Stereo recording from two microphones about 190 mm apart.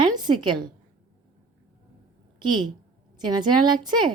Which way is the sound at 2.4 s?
25° right (ahead or behind).